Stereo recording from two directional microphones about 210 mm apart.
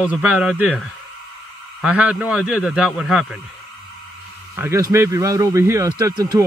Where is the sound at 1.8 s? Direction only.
5° right (ahead or behind).